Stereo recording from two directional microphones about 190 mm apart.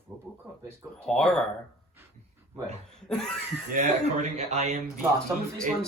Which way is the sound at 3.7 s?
35° right (ahead or behind).